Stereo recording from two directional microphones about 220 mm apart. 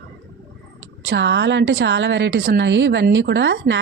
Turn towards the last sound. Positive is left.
turn(degrees=-50)  # may be behind; listen again after turning